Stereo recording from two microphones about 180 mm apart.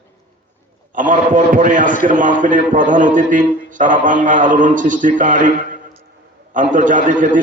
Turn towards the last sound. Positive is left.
turn(degrees=-45)  # may be behind; listen again after turning